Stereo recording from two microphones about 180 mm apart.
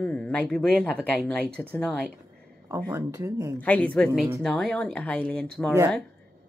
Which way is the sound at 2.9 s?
15° right (ahead or behind).